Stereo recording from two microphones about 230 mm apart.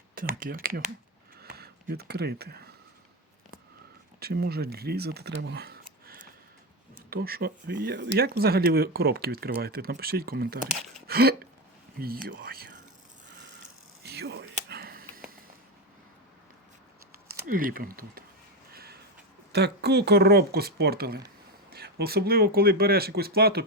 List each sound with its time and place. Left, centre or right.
0.2 s speech: right
1.4 s a sound: right
4.2 s speech: right
11.0 s a sound: right
11.9 s speech: right
13.3 s mechanisms: right
17.2 s speech: right
18.7 s a sound: right
19.5 s speech: right